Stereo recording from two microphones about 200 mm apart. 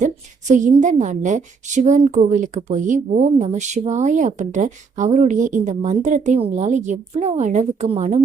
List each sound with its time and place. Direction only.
0.0 s a woman's voice: 40° right (ahead or behind)